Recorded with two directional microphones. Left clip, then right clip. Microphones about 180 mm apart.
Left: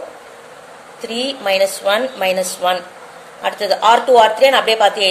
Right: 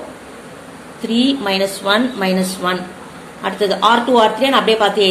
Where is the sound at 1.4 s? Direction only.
35° left (ahead or behind).